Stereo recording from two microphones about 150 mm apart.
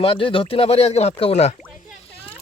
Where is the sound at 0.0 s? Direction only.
35° left (ahead or behind).